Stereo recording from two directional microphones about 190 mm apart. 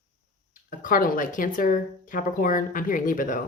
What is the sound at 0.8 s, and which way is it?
Speech, 45° left (ahead or behind).